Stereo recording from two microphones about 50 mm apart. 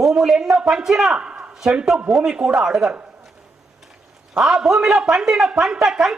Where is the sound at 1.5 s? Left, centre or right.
Centre.